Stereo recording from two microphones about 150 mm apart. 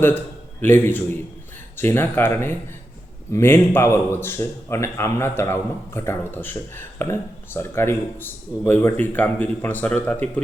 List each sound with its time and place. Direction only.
0.6 s speech: 15° left (ahead or behind)